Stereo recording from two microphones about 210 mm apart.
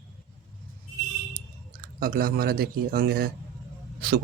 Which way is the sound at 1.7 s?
45° right (ahead or behind).